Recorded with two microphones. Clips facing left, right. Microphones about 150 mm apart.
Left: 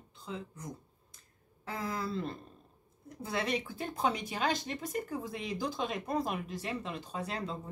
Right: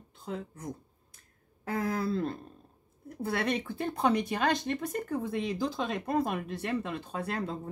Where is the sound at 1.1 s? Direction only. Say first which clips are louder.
Even; 55° right (ahead or behind).